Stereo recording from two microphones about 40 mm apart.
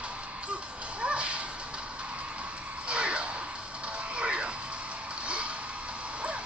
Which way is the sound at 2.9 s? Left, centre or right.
Right.